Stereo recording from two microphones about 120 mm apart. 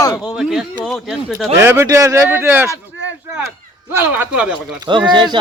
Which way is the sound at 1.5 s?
20° right (ahead or behind).